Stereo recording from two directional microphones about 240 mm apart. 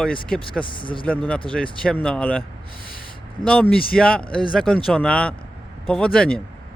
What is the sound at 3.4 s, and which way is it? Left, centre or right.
Speech, centre.